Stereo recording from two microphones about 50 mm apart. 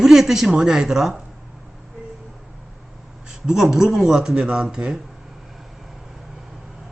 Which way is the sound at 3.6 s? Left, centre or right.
Centre.